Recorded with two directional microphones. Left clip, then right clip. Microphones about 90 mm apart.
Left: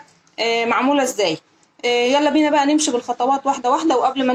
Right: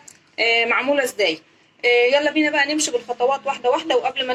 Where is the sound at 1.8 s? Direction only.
90° left.